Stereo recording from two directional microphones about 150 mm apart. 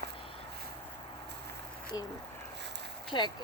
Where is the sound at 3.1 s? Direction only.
30° left (ahead or behind).